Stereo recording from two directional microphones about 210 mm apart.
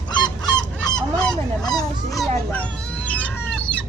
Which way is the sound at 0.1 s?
20° left (ahead or behind).